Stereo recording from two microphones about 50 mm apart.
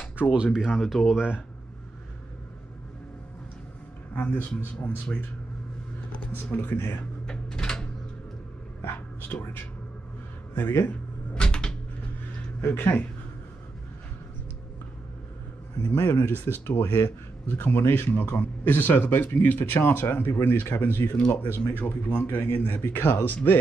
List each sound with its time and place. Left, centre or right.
0.2 s speech: right
0.7 s speech: centre
1.1 s speech: centre
4.1 s speech: left
6.3 s speech: left
7.2 s a sound: centre
8.8 s speech: left
11.3 s cupboard open or close: centre
12.6 s speech: left
15.8 s speech: left